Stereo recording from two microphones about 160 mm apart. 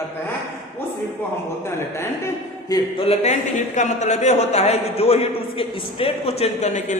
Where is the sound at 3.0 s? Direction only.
40° left (ahead or behind).